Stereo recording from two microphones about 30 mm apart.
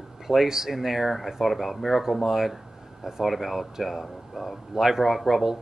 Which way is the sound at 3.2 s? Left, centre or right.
Centre.